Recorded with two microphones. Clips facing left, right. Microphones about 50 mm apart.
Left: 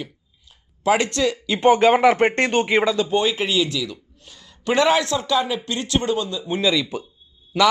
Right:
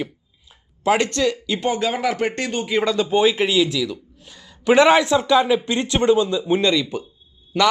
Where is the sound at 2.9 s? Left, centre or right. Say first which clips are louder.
Right 3 dB; centre.